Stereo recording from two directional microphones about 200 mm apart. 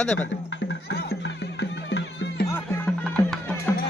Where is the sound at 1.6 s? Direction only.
60° left (ahead or behind).